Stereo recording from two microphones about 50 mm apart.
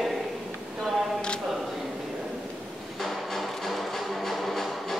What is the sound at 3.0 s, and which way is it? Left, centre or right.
Music, centre.